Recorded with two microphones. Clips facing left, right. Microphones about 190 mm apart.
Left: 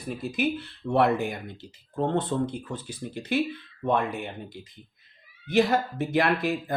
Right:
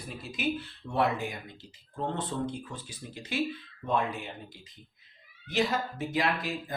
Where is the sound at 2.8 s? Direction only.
60° left (ahead or behind).